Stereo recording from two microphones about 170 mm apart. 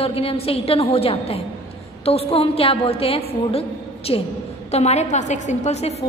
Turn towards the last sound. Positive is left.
turn(degrees=40)  # may be behind; listen again after turning